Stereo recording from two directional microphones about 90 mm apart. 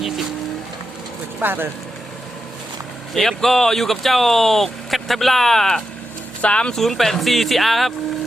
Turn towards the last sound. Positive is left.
turn(degrees=0)  # may be behind; listen again after turning